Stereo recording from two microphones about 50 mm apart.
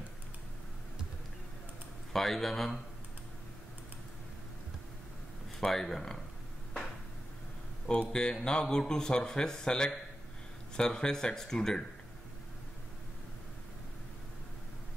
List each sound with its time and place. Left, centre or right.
2.1 s speech: centre
5.6 s a man's voice: centre
8.1 s a man's voice: centre